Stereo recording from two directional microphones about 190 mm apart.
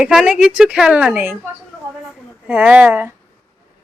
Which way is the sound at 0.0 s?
5° right (ahead or behind).